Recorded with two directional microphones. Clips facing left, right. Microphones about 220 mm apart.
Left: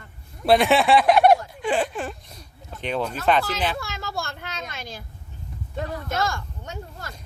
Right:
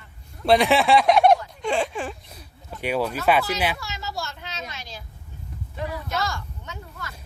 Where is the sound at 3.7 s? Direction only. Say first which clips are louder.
Left 2 dB; 55° left (ahead or behind).